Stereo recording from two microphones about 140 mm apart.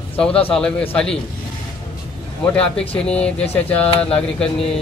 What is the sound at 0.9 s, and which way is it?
Speech, 5° left (ahead or behind).